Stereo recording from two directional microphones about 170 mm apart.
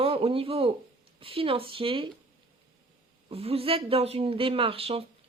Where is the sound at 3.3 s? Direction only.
35° right (ahead or behind).